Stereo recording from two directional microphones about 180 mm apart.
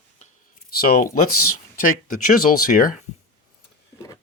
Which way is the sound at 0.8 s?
55° left (ahead or behind).